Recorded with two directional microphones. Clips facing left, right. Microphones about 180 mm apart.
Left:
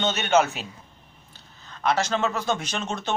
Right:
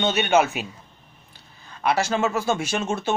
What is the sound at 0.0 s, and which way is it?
Speech, 15° right (ahead or behind).